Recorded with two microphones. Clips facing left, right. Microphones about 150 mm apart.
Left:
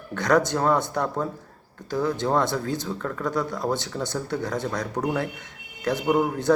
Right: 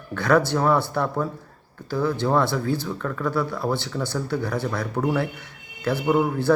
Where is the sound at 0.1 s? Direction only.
20° left (ahead or behind).